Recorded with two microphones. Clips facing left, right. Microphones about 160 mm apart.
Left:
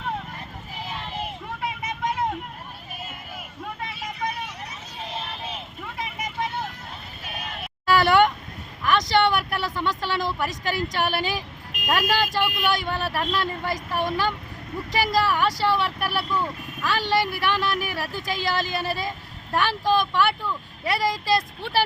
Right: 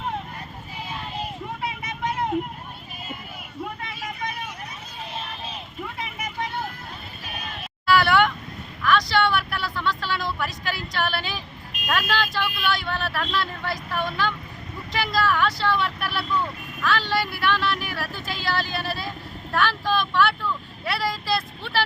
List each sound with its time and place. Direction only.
7.9 s vehicle: 15° left (ahead or behind)
8.8 s a sound: 20° left (ahead or behind)
10.9 s speech: 15° left (ahead or behind)